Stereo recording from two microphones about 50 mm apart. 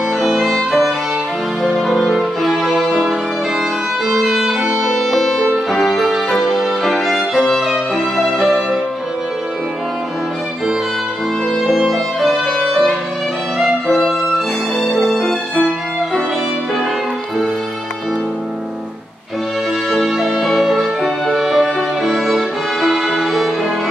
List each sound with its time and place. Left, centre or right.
0.2 s violin: centre
1.6 s music: centre
2.9 s violin: centre
4.1 s violin: centre
4.8 s music: centre
6.8 s violin: centre
11.6 s music: centre
19.9 s music: centre